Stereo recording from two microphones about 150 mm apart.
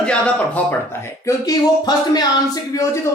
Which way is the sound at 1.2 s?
25° left (ahead or behind).